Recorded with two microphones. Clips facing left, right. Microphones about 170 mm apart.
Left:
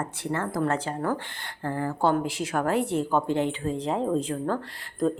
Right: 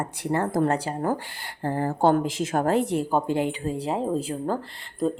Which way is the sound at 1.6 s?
40° right (ahead or behind).